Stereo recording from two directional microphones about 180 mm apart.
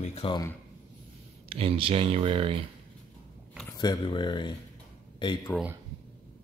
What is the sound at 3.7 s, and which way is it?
Speech, 25° left (ahead or behind).